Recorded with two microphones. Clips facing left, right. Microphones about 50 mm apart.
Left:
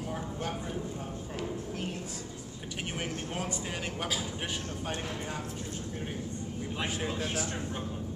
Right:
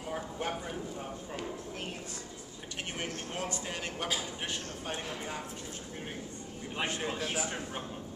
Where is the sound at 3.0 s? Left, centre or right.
Centre.